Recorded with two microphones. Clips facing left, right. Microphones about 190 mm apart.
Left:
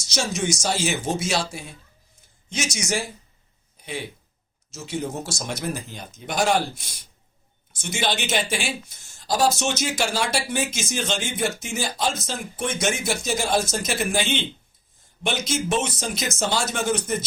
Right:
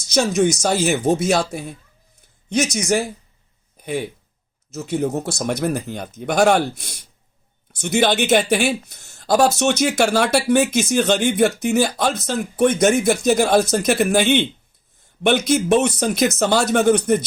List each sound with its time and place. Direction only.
0.1 s speech: 60° right (ahead or behind)
3.8 s a sound: 50° right (ahead or behind)
4.7 s speech: 60° right (ahead or behind)